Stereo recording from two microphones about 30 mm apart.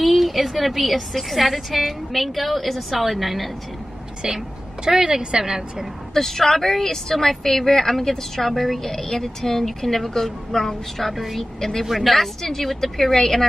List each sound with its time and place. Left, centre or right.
0.0 s a woman's voice: centre
4.8 s a woman's voice: right
6.1 s speech: centre
11.0 s a woman's voice: centre